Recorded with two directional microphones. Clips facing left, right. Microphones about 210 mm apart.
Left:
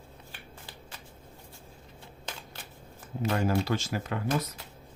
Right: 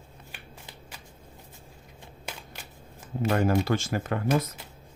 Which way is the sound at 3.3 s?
50° right (ahead or behind).